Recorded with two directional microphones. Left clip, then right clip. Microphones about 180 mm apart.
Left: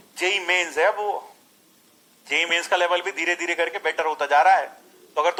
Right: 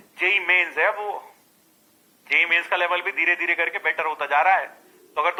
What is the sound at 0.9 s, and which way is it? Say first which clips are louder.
Speech: left 3 dB; 15° left (ahead or behind).